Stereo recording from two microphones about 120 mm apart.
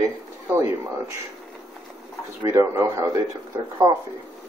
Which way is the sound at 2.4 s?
20° right (ahead or behind).